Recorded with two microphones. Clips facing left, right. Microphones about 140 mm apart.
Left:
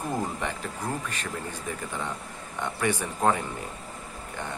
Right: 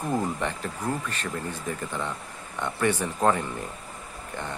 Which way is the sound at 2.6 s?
15° left (ahead or behind).